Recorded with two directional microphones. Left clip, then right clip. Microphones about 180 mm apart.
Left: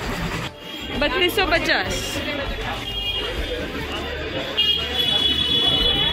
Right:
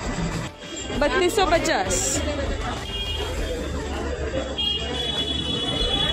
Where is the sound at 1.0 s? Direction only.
15° right (ahead or behind).